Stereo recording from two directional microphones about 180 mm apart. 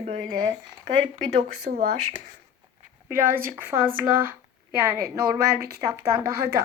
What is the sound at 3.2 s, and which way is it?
Speech, 50° right (ahead or behind).